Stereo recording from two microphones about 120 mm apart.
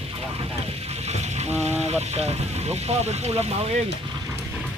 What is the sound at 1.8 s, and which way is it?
Speech, 65° right (ahead or behind).